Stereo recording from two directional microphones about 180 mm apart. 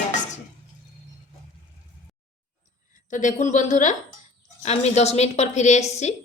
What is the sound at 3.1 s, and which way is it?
A woman's voice, 45° left (ahead or behind).